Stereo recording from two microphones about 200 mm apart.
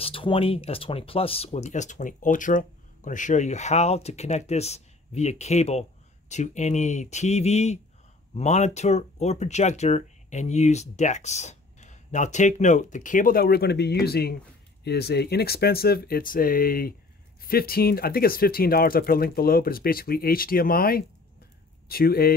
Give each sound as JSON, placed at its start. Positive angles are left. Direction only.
{"t": 0.0, "sound": "speech", "side_deg": 25}